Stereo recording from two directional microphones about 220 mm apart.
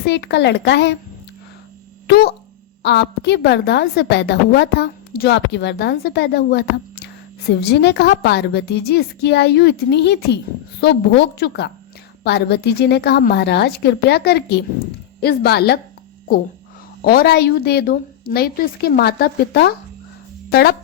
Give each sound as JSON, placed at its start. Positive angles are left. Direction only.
{"t": 0.0, "sound": "a woman's voice", "side_deg": 50}
{"t": 2.0, "sound": "a woman's voice", "side_deg": 45}
{"t": 17.0, "sound": "a woman's voice", "side_deg": 45}